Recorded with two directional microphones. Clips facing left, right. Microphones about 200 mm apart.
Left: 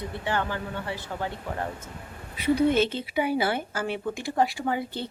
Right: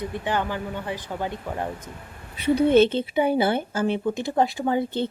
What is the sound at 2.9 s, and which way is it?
Speech, 25° right (ahead or behind).